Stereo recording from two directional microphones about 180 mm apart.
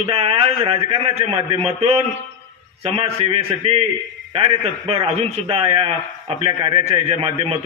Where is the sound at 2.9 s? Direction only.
35° right (ahead or behind).